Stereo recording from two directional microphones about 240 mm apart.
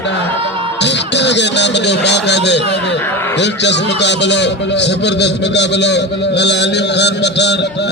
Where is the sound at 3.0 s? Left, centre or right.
Centre.